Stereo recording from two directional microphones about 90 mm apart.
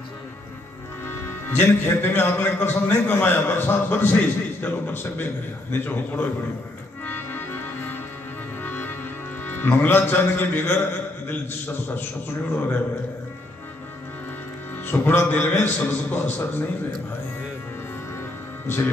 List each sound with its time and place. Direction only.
1.0 s a man's voice: 25° left (ahead or behind)
7.1 s music: 25° left (ahead or behind)
9.4 s a man's voice: 25° left (ahead or behind)
14.9 s a man's voice: 25° left (ahead or behind)